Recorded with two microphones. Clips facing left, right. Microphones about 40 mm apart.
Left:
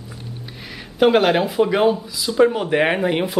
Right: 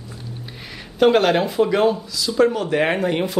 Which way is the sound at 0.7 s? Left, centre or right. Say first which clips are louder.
Even; centre.